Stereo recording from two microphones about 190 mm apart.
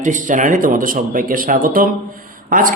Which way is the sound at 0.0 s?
40° right (ahead or behind).